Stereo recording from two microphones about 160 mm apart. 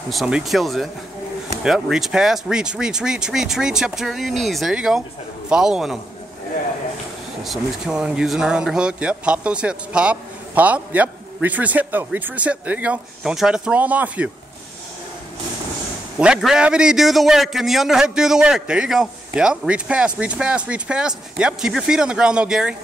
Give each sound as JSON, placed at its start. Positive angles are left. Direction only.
{"t": 0.1, "sound": "a man's voice", "side_deg": 0}
{"t": 7.4, "sound": "speech", "side_deg": 0}
{"t": 16.2, "sound": "a man's voice", "side_deg": -5}